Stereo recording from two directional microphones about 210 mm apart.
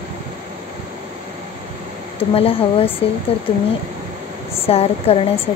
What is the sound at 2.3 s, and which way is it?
Speech, 25° left (ahead or behind).